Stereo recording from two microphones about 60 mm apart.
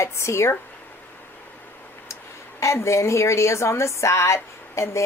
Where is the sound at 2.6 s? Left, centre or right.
Left.